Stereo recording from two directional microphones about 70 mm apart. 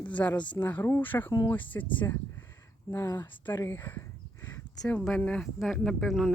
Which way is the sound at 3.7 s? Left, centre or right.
Left.